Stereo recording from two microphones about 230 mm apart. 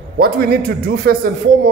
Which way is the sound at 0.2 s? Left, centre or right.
Right.